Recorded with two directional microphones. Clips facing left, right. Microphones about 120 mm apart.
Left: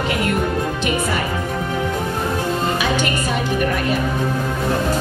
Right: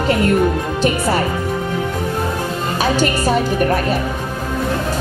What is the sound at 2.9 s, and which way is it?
Speech, 40° right (ahead or behind).